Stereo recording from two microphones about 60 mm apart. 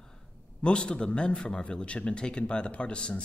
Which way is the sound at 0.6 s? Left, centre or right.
Centre.